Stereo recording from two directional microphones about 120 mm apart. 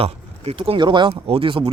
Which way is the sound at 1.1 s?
50° right (ahead or behind).